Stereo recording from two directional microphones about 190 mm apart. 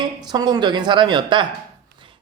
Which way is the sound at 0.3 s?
20° right (ahead or behind).